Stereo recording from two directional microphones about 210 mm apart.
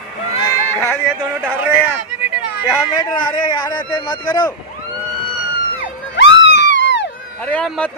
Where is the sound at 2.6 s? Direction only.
20° left (ahead or behind).